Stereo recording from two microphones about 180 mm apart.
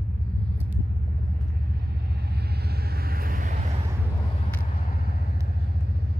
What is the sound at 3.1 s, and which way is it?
Vehicle, 50° right (ahead or behind).